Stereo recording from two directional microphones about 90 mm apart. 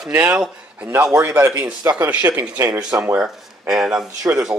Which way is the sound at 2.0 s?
20° right (ahead or behind).